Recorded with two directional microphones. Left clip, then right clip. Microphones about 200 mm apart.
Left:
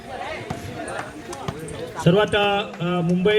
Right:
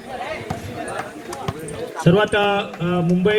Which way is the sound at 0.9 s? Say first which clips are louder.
Right 3 dB; 5° right (ahead or behind).